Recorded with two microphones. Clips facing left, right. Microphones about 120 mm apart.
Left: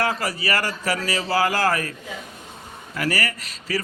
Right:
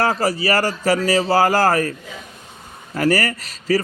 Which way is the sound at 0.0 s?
35° right (ahead or behind).